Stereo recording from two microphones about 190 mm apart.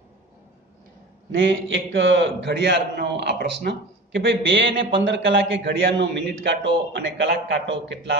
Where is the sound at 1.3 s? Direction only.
75° right (ahead or behind).